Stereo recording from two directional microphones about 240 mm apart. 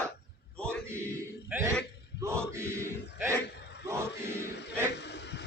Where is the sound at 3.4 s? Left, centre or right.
Left.